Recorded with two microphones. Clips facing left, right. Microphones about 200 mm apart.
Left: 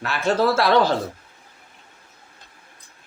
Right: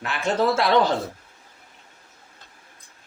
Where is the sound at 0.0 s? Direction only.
20° right (ahead or behind).